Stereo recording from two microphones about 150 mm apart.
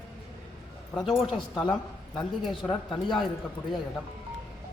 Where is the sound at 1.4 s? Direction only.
30° left (ahead or behind).